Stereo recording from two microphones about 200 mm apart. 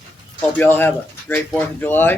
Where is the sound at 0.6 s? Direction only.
10° left (ahead or behind).